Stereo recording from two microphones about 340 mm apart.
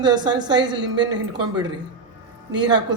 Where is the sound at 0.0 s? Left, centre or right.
Centre.